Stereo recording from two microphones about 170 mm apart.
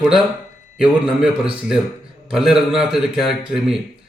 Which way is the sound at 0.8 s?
5° right (ahead or behind).